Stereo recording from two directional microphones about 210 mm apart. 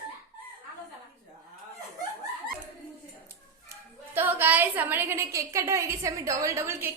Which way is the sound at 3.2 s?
10° right (ahead or behind).